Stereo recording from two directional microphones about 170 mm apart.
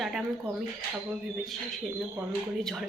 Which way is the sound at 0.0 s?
Centre (ahead or behind).